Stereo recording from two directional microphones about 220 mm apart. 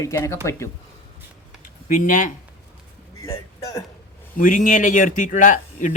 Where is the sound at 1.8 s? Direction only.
35° left (ahead or behind).